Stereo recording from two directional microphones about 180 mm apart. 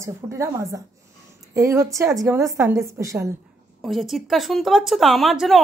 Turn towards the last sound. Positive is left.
turn(degrees=0)  # may be behind; listen again after turning